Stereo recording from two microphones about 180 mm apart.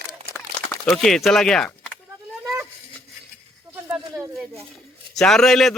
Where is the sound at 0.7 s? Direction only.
Centre (ahead or behind).